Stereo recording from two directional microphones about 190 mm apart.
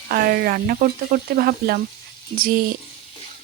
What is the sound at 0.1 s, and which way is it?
Speech, 50° right (ahead or behind).